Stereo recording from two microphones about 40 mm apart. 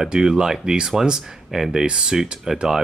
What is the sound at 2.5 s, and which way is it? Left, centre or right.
Speech, centre.